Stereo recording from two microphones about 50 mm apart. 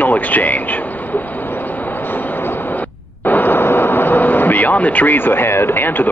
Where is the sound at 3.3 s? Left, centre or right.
Left.